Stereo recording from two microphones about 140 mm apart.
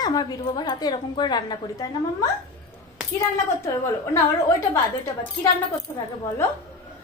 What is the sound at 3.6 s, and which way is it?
Speech, 20° left (ahead or behind).